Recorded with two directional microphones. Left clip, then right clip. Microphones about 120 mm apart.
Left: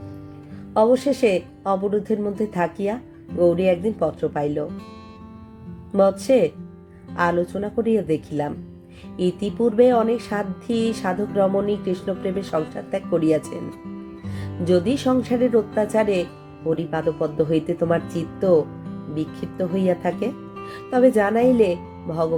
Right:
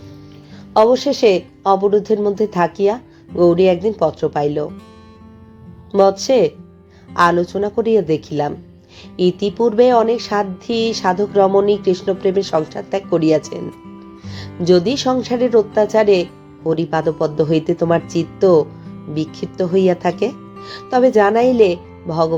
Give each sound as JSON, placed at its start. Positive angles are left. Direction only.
{"t": 0.8, "sound": "speech", "side_deg": -15}
{"t": 5.9, "sound": "speech", "side_deg": -15}